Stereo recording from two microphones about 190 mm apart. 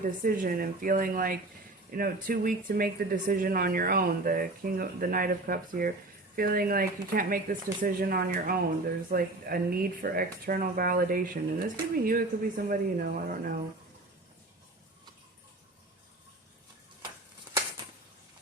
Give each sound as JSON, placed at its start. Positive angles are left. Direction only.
{"t": 0.0, "sound": "speech", "side_deg": -45}